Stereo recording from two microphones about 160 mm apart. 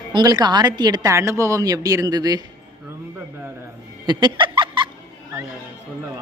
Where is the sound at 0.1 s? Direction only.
25° right (ahead or behind).